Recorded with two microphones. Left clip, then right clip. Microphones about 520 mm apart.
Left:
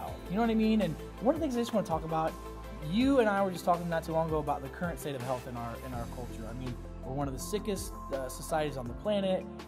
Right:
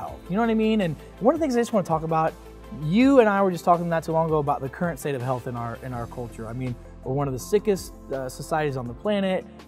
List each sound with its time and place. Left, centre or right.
0.0 s speech: right
7.2 s speech: right